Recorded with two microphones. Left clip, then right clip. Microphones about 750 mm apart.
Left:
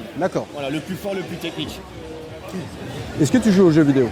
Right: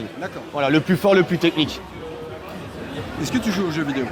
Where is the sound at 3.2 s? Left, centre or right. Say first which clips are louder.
Left 9 dB; left.